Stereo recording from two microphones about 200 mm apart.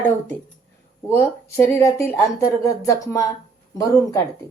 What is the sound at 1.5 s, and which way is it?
Speech, 10° left (ahead or behind).